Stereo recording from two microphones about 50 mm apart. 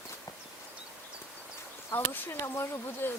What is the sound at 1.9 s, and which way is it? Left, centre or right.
Speech, left.